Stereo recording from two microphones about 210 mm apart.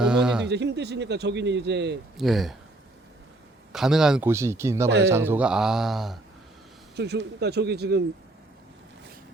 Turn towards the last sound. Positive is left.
turn(degrees=-50)  # may be behind; listen again after turning